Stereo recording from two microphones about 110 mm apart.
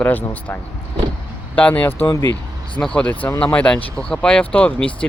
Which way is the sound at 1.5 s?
15° left (ahead or behind).